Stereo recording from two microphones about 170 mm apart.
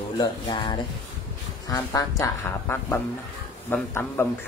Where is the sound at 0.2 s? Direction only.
25° left (ahead or behind).